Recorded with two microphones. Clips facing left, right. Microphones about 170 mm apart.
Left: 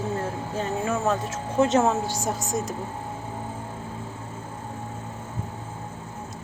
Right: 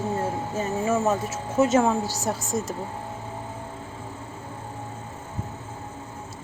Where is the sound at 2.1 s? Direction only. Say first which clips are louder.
Even; 20° left (ahead or behind).